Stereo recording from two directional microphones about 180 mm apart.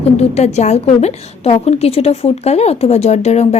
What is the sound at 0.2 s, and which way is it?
A woman's voice, 35° left (ahead or behind).